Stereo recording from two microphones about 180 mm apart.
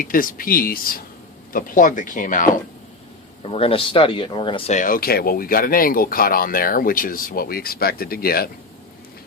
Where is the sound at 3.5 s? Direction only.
30° left (ahead or behind).